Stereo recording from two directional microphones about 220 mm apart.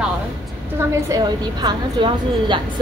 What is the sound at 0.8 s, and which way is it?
A woman's voice, 15° right (ahead or behind).